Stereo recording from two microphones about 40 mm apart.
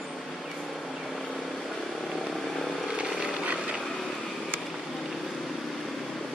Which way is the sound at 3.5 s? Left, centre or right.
Right.